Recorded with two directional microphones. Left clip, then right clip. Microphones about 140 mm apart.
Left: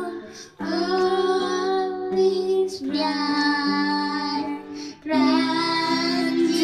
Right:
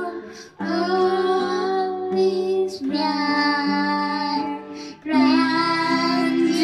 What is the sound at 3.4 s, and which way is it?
Music, 35° right (ahead or behind).